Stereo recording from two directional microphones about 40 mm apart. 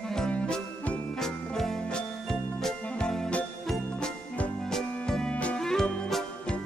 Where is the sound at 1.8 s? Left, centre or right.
Left.